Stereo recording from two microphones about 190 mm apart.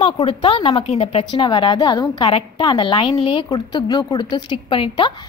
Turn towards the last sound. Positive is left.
turn(degrees=25)  # may be behind; listen again after turning